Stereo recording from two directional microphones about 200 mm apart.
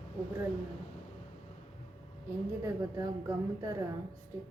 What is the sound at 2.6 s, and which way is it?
A woman's voice, 15° right (ahead or behind).